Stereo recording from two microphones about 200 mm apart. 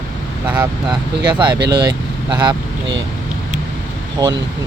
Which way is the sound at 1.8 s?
20° right (ahead or behind).